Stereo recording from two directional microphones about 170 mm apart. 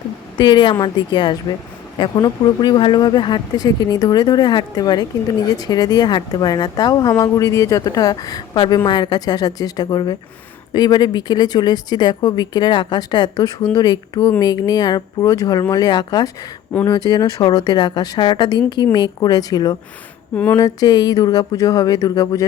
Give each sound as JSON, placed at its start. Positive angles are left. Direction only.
{"t": 0.3, "sound": "speech", "side_deg": 25}
{"t": 20.3, "sound": "a sound", "side_deg": 10}
{"t": 20.6, "sound": "speech", "side_deg": 20}